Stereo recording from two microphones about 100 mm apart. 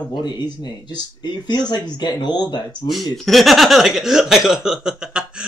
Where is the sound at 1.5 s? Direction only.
45° left (ahead or behind).